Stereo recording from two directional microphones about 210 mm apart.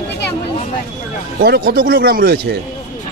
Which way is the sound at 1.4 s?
45° right (ahead or behind).